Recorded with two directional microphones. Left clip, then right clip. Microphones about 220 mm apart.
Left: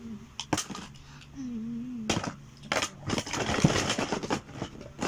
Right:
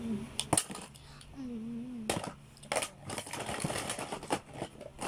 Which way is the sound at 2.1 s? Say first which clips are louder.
Left 5 dB; 15° right (ahead or behind).